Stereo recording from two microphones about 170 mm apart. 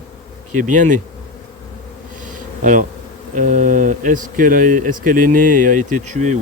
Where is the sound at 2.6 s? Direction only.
50° right (ahead or behind).